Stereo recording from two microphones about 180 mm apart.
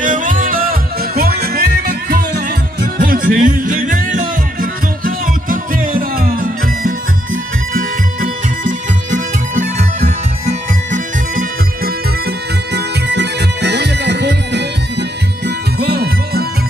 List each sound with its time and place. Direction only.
0.0 s music: 45° right (ahead or behind)
12.7 s music: 70° right (ahead or behind)